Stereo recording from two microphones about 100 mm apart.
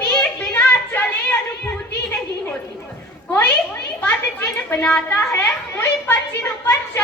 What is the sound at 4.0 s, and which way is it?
A child's voice, 20° left (ahead or behind).